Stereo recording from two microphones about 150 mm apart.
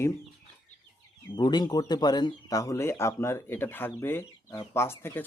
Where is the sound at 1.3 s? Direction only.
30° left (ahead or behind).